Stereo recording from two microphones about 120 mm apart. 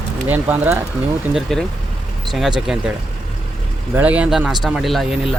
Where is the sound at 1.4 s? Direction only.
Centre (ahead or behind).